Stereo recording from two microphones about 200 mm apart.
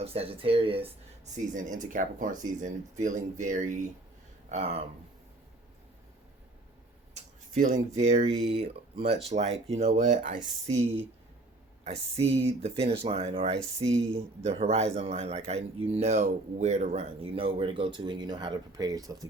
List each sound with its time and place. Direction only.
0.0 s speech: 30° right (ahead or behind)
1.5 s speech: 40° right (ahead or behind)
7.1 s speech: 40° right (ahead or behind)
11.9 s speech: 30° right (ahead or behind)